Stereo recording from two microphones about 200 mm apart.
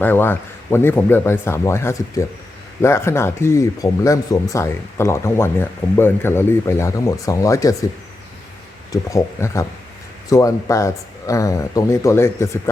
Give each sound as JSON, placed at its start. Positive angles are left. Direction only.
{"t": 0.0, "sound": "speech", "side_deg": 10}
{"t": 8.9, "sound": "speech", "side_deg": 15}